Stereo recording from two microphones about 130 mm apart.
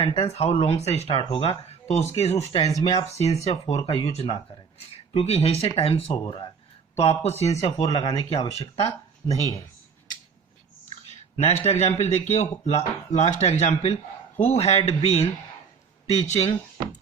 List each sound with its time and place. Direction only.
0.0 s speech: 45° left (ahead or behind)
7.9 s speech: 40° left (ahead or behind)
9.2 s speech: 25° left (ahead or behind)
11.3 s speech: 60° left (ahead or behind)